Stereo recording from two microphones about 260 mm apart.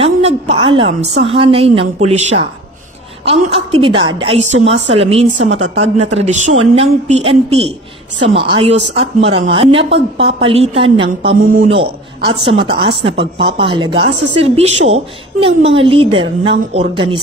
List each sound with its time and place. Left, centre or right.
0.0 s a woman's voice: right
11.3 s a man's voice: right
11.7 s a man's voice: right